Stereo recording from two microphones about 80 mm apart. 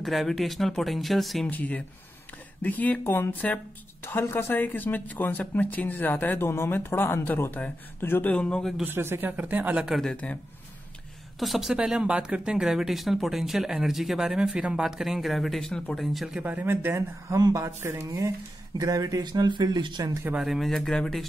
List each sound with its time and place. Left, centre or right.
0.0 s speech: centre
1.5 s speech: left
8.3 s speech: centre
8.8 s speech: right
9.8 s speech: centre
11.3 s speech: centre
11.7 s speech: centre
16.4 s speech: right
17.4 s speech: right
17.6 s speech: right
18.8 s speech: right
20.3 s speech: centre